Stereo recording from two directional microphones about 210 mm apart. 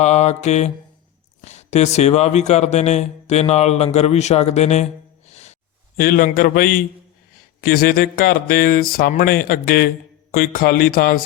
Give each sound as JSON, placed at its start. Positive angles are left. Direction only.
{"t": 0.0, "sound": "a man's voice", "side_deg": 30}
{"t": 6.0, "sound": "a man's voice", "side_deg": 40}
{"t": 7.6, "sound": "mantra", "side_deg": 45}